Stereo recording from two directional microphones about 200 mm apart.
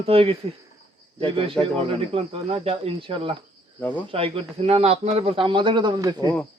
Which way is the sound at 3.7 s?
10° left (ahead or behind).